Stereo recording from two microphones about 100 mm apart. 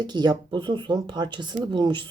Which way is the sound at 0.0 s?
45° right (ahead or behind).